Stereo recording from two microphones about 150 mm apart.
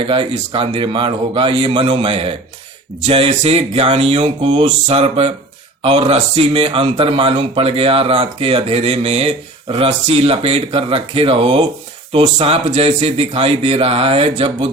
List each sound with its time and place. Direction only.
0.0 s a man's voice: 35° right (ahead or behind)